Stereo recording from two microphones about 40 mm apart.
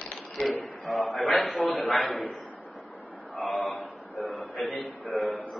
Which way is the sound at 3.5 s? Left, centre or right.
Centre.